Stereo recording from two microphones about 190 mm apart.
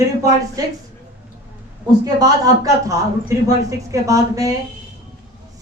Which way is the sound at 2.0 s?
20° right (ahead or behind).